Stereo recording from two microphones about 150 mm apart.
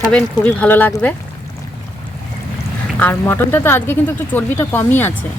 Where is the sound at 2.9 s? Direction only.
10° left (ahead or behind).